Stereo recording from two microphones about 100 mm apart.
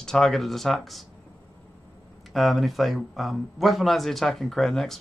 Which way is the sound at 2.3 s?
Centre (ahead or behind).